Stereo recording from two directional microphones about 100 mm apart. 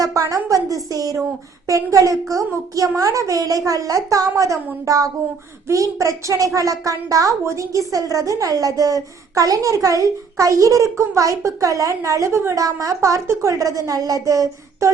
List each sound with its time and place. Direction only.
0.0 s a woman's voice: 35° right (ahead or behind)